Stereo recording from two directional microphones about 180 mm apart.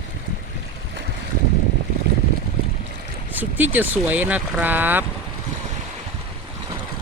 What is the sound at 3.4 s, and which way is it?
Speech, 10° right (ahead or behind).